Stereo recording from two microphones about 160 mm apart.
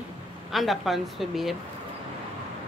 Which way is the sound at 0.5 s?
Centre (ahead or behind).